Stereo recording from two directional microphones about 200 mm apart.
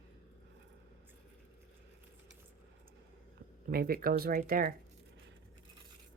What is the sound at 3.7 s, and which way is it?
Speech, 50° right (ahead or behind).